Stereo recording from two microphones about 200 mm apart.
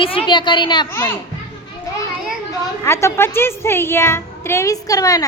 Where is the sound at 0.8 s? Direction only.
10° left (ahead or behind).